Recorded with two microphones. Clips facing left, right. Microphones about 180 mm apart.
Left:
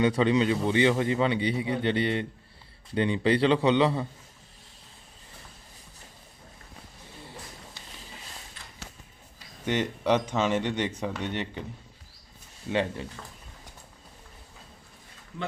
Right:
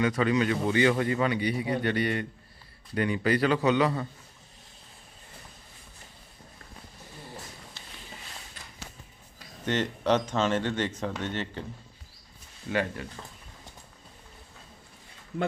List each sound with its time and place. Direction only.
0.0 s a man's voice: 30° left (ahead or behind)
9.6 s speech: 10° left (ahead or behind)
12.7 s a man's voice: 25° left (ahead or behind)